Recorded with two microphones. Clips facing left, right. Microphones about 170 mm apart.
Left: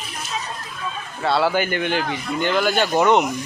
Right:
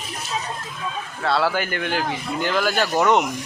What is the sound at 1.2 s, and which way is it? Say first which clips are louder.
A man's voice: left 2 dB; centre (ahead or behind).